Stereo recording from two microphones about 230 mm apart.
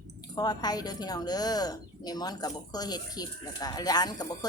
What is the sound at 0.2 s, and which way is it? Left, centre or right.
Speech, centre.